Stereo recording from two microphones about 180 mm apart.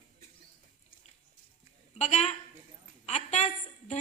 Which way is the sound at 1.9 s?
40° left (ahead or behind).